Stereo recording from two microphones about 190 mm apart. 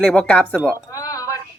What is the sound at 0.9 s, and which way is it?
Chink, 20° left (ahead or behind).